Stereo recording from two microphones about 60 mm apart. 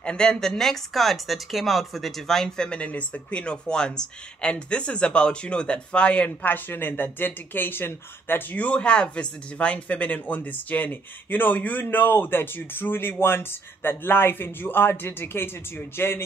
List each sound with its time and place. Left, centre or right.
0.0 s a man's voice: centre; by 16.3 s left